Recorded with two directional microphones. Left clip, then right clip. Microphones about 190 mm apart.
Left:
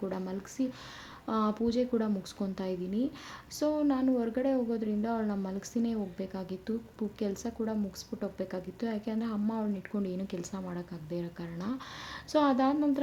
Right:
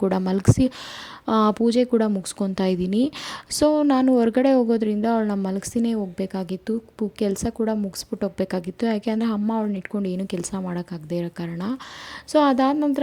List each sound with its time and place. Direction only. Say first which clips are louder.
0.0 s speech: right 15 dB; 55° right (ahead or behind)